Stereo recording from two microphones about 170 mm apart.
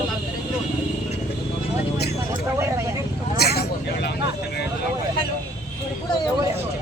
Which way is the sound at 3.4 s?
65° left (ahead or behind).